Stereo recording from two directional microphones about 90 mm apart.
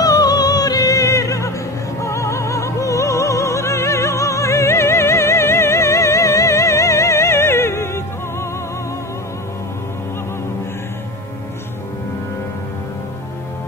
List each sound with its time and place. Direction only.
0.0 s music: 45° left (ahead or behind)